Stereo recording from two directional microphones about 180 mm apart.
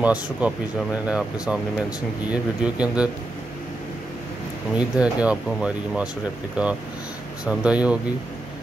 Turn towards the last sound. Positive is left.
turn(degrees=-5)  # may be behind; listen again after turning